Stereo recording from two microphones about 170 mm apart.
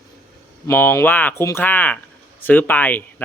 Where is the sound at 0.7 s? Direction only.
10° left (ahead or behind).